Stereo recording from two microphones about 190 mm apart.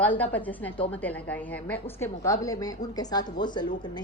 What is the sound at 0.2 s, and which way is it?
A woman's voice, 10° left (ahead or behind).